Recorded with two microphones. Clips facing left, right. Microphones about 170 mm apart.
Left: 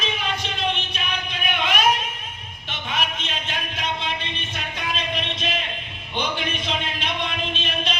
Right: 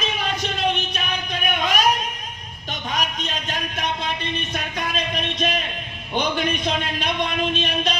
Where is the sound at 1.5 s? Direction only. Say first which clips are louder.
Even; 40° right (ahead or behind).